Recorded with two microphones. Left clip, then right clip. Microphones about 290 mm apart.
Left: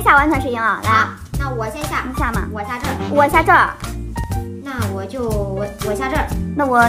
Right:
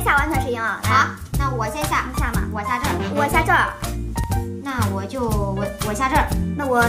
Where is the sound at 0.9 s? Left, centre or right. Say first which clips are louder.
Left 2 dB; right.